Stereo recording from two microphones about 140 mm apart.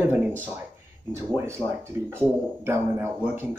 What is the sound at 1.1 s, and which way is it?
Speech, 20° right (ahead or behind).